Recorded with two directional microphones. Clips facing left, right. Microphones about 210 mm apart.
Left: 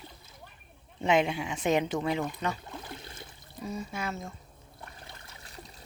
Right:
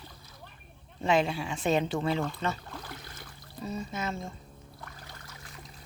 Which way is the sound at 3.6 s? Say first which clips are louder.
Right 1 dB; 10° left (ahead or behind).